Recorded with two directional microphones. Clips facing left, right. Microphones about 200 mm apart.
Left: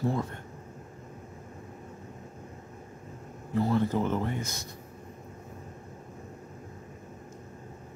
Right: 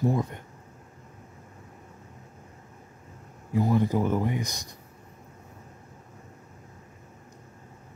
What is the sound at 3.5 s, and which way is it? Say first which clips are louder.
Speech: right 2 dB; 15° right (ahead or behind).